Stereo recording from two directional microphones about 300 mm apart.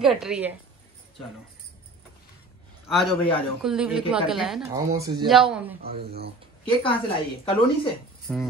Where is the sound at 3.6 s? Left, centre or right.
Centre.